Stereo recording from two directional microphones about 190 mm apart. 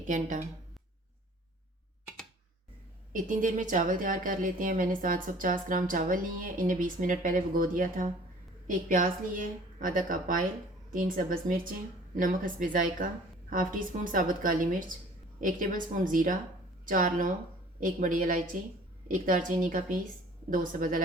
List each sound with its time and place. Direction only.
0.1 s speech: 40° right (ahead or behind)
3.1 s a woman's voice: 45° right (ahead or behind)